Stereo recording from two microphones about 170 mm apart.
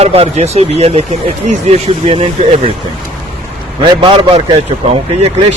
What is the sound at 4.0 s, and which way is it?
Speech, 30° right (ahead or behind).